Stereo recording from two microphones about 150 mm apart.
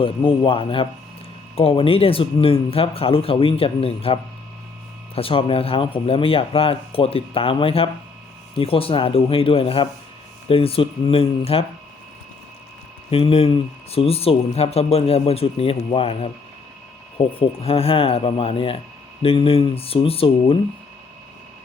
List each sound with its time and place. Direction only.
0.0 s speech: 35° left (ahead or behind)
13.1 s speech: 40° left (ahead or behind)